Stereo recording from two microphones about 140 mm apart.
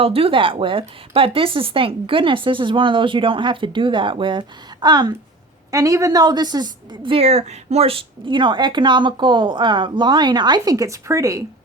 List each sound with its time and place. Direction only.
0.0 s a woman's voice: 40° right (ahead or behind); by 11.4 s 20° right (ahead or behind)